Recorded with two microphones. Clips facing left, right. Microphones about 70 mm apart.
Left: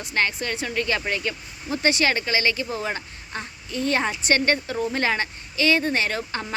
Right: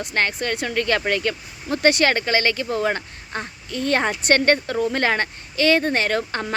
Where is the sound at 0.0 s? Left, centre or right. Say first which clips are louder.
Right 2 dB; right.